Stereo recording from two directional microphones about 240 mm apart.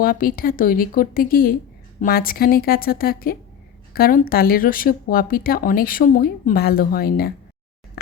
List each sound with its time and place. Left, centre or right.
0.0 s speech: left